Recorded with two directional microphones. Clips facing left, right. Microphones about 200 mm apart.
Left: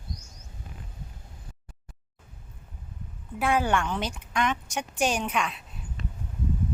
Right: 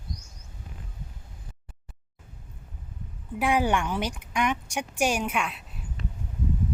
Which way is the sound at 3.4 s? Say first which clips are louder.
Right 1 dB; 15° right (ahead or behind).